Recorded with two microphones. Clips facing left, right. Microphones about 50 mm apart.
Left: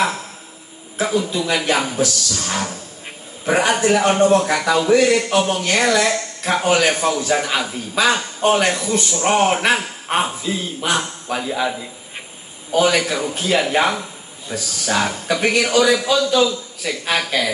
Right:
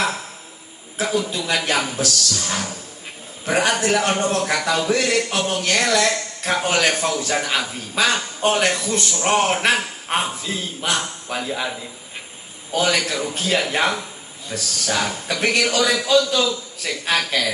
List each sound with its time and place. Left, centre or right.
0.9 s a man's voice: centre
3.4 s a man's voice: centre
7.4 s a man's voice: centre
8.6 s a man's voice: centre
12.7 s a man's voice: centre